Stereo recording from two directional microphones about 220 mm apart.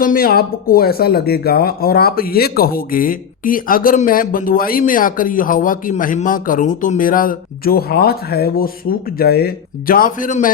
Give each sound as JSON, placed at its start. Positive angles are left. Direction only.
{"t": 0.0, "sound": "speech", "side_deg": 40}